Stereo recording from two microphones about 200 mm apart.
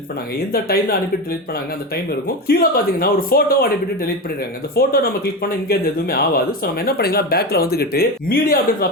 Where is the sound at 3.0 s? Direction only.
45° left (ahead or behind).